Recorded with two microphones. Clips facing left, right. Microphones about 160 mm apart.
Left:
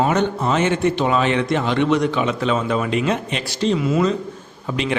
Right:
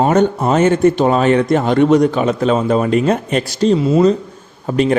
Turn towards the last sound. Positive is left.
turn(degrees=-45)  # may be behind; listen again after turning